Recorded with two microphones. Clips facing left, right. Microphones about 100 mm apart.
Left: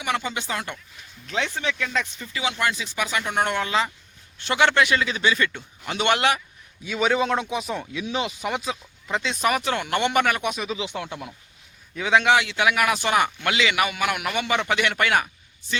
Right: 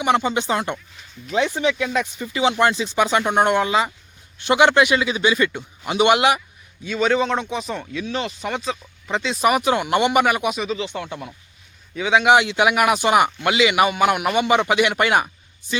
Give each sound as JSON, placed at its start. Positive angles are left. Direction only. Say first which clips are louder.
{"t": 0.0, "sound": "a man's voice", "louder": "right 8 dB", "side_deg": -25}
{"t": 1.3, "sound": "a man's voice", "louder": "right 7 dB", "side_deg": -10}
{"t": 2.3, "sound": "a man's voice", "louder": "right 8 dB", "side_deg": -30}
{"t": 6.8, "sound": "speech", "louder": "right 3 dB", "side_deg": 5}
{"t": 9.4, "sound": "a man's voice", "louder": "right 7 dB", "side_deg": -15}
{"t": 10.5, "sound": "speech", "louder": "right 4 dB", "side_deg": 0}
{"t": 12.2, "sound": "a man's voice", "louder": "right 4 dB", "side_deg": -20}